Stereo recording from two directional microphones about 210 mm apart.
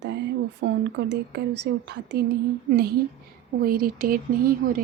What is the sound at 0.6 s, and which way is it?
Speech, 65° right (ahead or behind).